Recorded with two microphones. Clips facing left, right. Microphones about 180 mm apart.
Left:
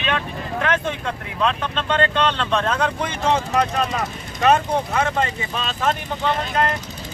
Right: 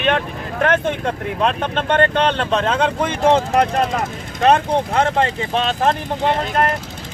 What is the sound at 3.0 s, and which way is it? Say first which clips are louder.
Speech: right 6 dB; 50° right (ahead or behind).